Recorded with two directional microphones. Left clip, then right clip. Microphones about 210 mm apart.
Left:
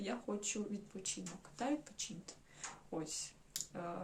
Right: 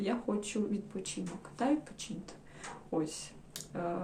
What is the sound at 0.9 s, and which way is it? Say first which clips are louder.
Speech: right 5 dB; 10° left (ahead or behind).